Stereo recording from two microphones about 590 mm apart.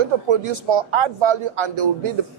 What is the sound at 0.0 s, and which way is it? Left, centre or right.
A man's voice, right.